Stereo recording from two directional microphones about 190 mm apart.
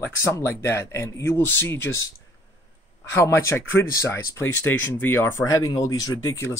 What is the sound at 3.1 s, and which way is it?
Speech, 15° left (ahead or behind).